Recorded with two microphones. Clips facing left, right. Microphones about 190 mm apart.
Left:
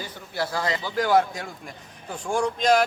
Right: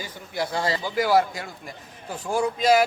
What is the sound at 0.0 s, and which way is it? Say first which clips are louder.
A man's voice: even; 15° right (ahead or behind).